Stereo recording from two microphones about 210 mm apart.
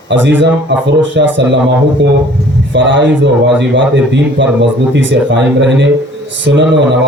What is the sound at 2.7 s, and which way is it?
A man's voice, 60° right (ahead or behind).